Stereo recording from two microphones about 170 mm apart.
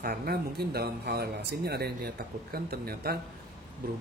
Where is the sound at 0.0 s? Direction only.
65° right (ahead or behind).